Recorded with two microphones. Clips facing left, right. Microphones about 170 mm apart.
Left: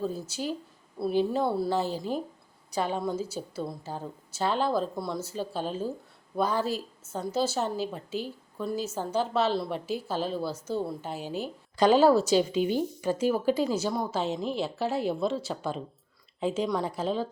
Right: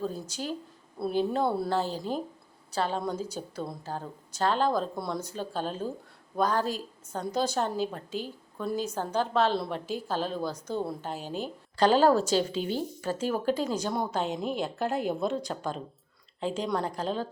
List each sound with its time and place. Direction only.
0.1 s a woman's voice: 10° left (ahead or behind)